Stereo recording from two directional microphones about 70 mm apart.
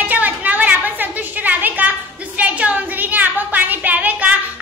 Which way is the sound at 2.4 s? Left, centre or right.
Centre.